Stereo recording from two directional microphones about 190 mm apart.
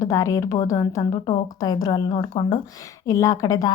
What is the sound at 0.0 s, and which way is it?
A woman's voice, 15° left (ahead or behind).